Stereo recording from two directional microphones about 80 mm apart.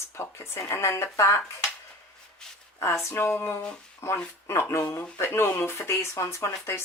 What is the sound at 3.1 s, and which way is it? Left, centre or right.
Speech, left.